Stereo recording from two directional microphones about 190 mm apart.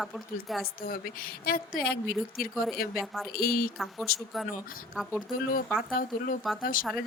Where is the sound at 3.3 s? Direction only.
50° left (ahead or behind).